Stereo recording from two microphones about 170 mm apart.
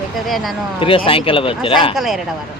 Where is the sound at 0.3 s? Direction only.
Centre (ahead or behind).